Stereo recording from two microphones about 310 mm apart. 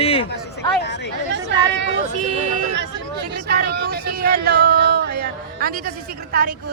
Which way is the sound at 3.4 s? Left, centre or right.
Right.